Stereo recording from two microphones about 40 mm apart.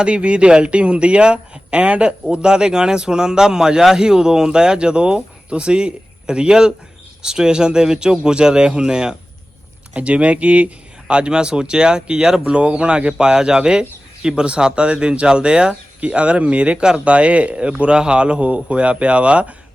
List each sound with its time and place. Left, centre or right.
0.0 s speech: right
2.3 s speech: right
9.9 s speech: right
11.1 s speech: right
16.0 s speech: right